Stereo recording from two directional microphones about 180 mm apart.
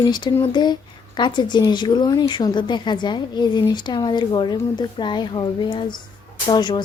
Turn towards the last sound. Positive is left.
turn(degrees=25)  # may be behind; listen again after turning